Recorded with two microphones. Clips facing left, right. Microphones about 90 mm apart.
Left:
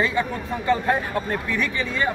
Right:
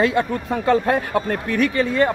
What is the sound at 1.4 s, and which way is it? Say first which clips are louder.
Speech: right 6 dB; 60° right (ahead or behind).